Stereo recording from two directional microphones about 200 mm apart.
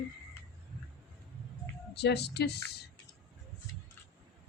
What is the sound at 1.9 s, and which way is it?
Speech, 55° left (ahead or behind).